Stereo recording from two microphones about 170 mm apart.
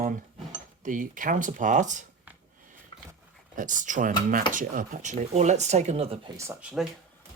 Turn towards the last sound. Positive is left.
turn(degrees=-15)  # may be behind; listen again after turning